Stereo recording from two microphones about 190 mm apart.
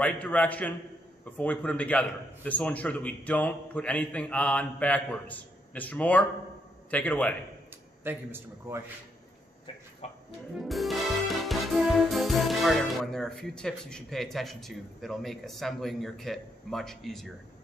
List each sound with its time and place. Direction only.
0.0 s a man's voice: 5° left (ahead or behind)
8.0 s a man's voice: 10° right (ahead or behind)
10.0 s music: 35° left (ahead or behind)
10.6 s music: centre (ahead or behind)